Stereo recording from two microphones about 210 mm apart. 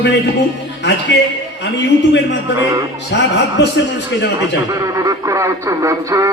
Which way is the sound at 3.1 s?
55° left (ahead or behind).